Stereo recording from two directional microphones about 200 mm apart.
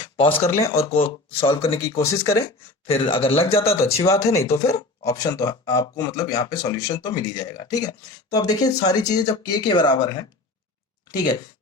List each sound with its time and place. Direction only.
0.0 s a sound: 25° left (ahead or behind)
0.4 s speech: 15° left (ahead or behind)
0.9 s speech: 30° left (ahead or behind)
2.0 s speech: 15° left (ahead or behind)
2.8 s speech: 25° left (ahead or behind)
3.6 s speech: 15° left (ahead or behind)